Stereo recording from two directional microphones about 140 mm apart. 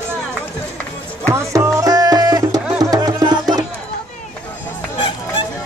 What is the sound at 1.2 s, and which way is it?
Music, 20° right (ahead or behind).